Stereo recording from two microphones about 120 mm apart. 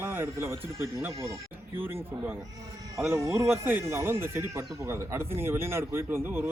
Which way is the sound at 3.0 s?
5° right (ahead or behind).